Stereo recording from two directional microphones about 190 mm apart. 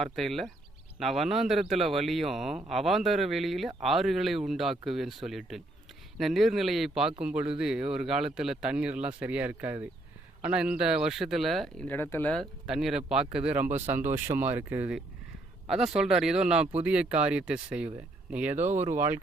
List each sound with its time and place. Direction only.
0.0 s a man's voice: centre (ahead or behind)
18.5 s speech: 35° right (ahead or behind)
18.9 s speech: 10° right (ahead or behind)